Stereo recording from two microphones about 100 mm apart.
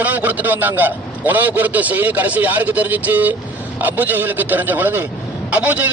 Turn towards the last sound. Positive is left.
turn(degrees=-15)  # may be behind; listen again after turning